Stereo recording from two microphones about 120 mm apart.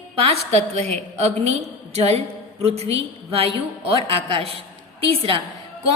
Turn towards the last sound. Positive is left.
turn(degrees=-50)  # may be behind; listen again after turning